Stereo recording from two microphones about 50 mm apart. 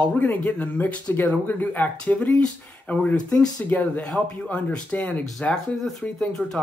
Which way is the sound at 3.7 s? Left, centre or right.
Left.